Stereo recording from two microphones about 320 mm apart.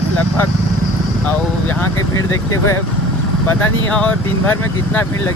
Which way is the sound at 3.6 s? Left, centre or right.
Centre.